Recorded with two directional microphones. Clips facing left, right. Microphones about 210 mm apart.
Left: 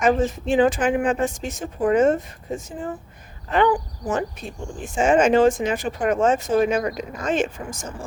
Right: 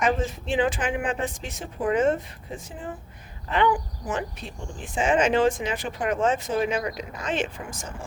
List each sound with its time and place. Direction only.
0.2 s speech: 45° left (ahead or behind)